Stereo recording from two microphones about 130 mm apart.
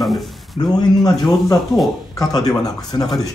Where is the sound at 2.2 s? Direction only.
30° left (ahead or behind).